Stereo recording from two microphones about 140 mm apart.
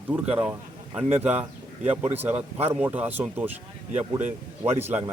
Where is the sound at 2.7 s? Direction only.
10° right (ahead or behind).